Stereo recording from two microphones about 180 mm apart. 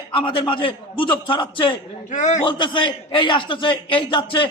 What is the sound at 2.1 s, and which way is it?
Speech, 45° left (ahead or behind).